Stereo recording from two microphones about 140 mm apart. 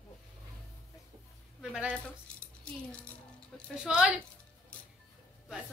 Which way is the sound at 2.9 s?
10° left (ahead or behind).